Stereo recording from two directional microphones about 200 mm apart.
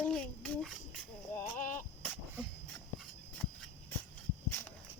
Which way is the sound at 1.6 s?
40° left (ahead or behind).